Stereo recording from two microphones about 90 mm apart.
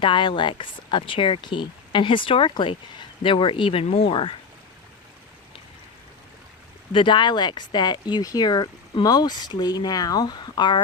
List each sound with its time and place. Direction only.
0.0 s speech: 65° left (ahead or behind)
6.9 s speech: 60° left (ahead or behind)